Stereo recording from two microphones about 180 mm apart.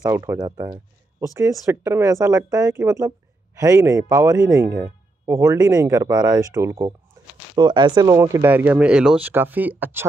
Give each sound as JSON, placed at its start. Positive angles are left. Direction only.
{"t": 0.0, "sound": "speech", "side_deg": -15}